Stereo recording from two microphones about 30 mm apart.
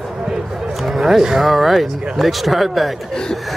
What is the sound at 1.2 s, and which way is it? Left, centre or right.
Speech, centre.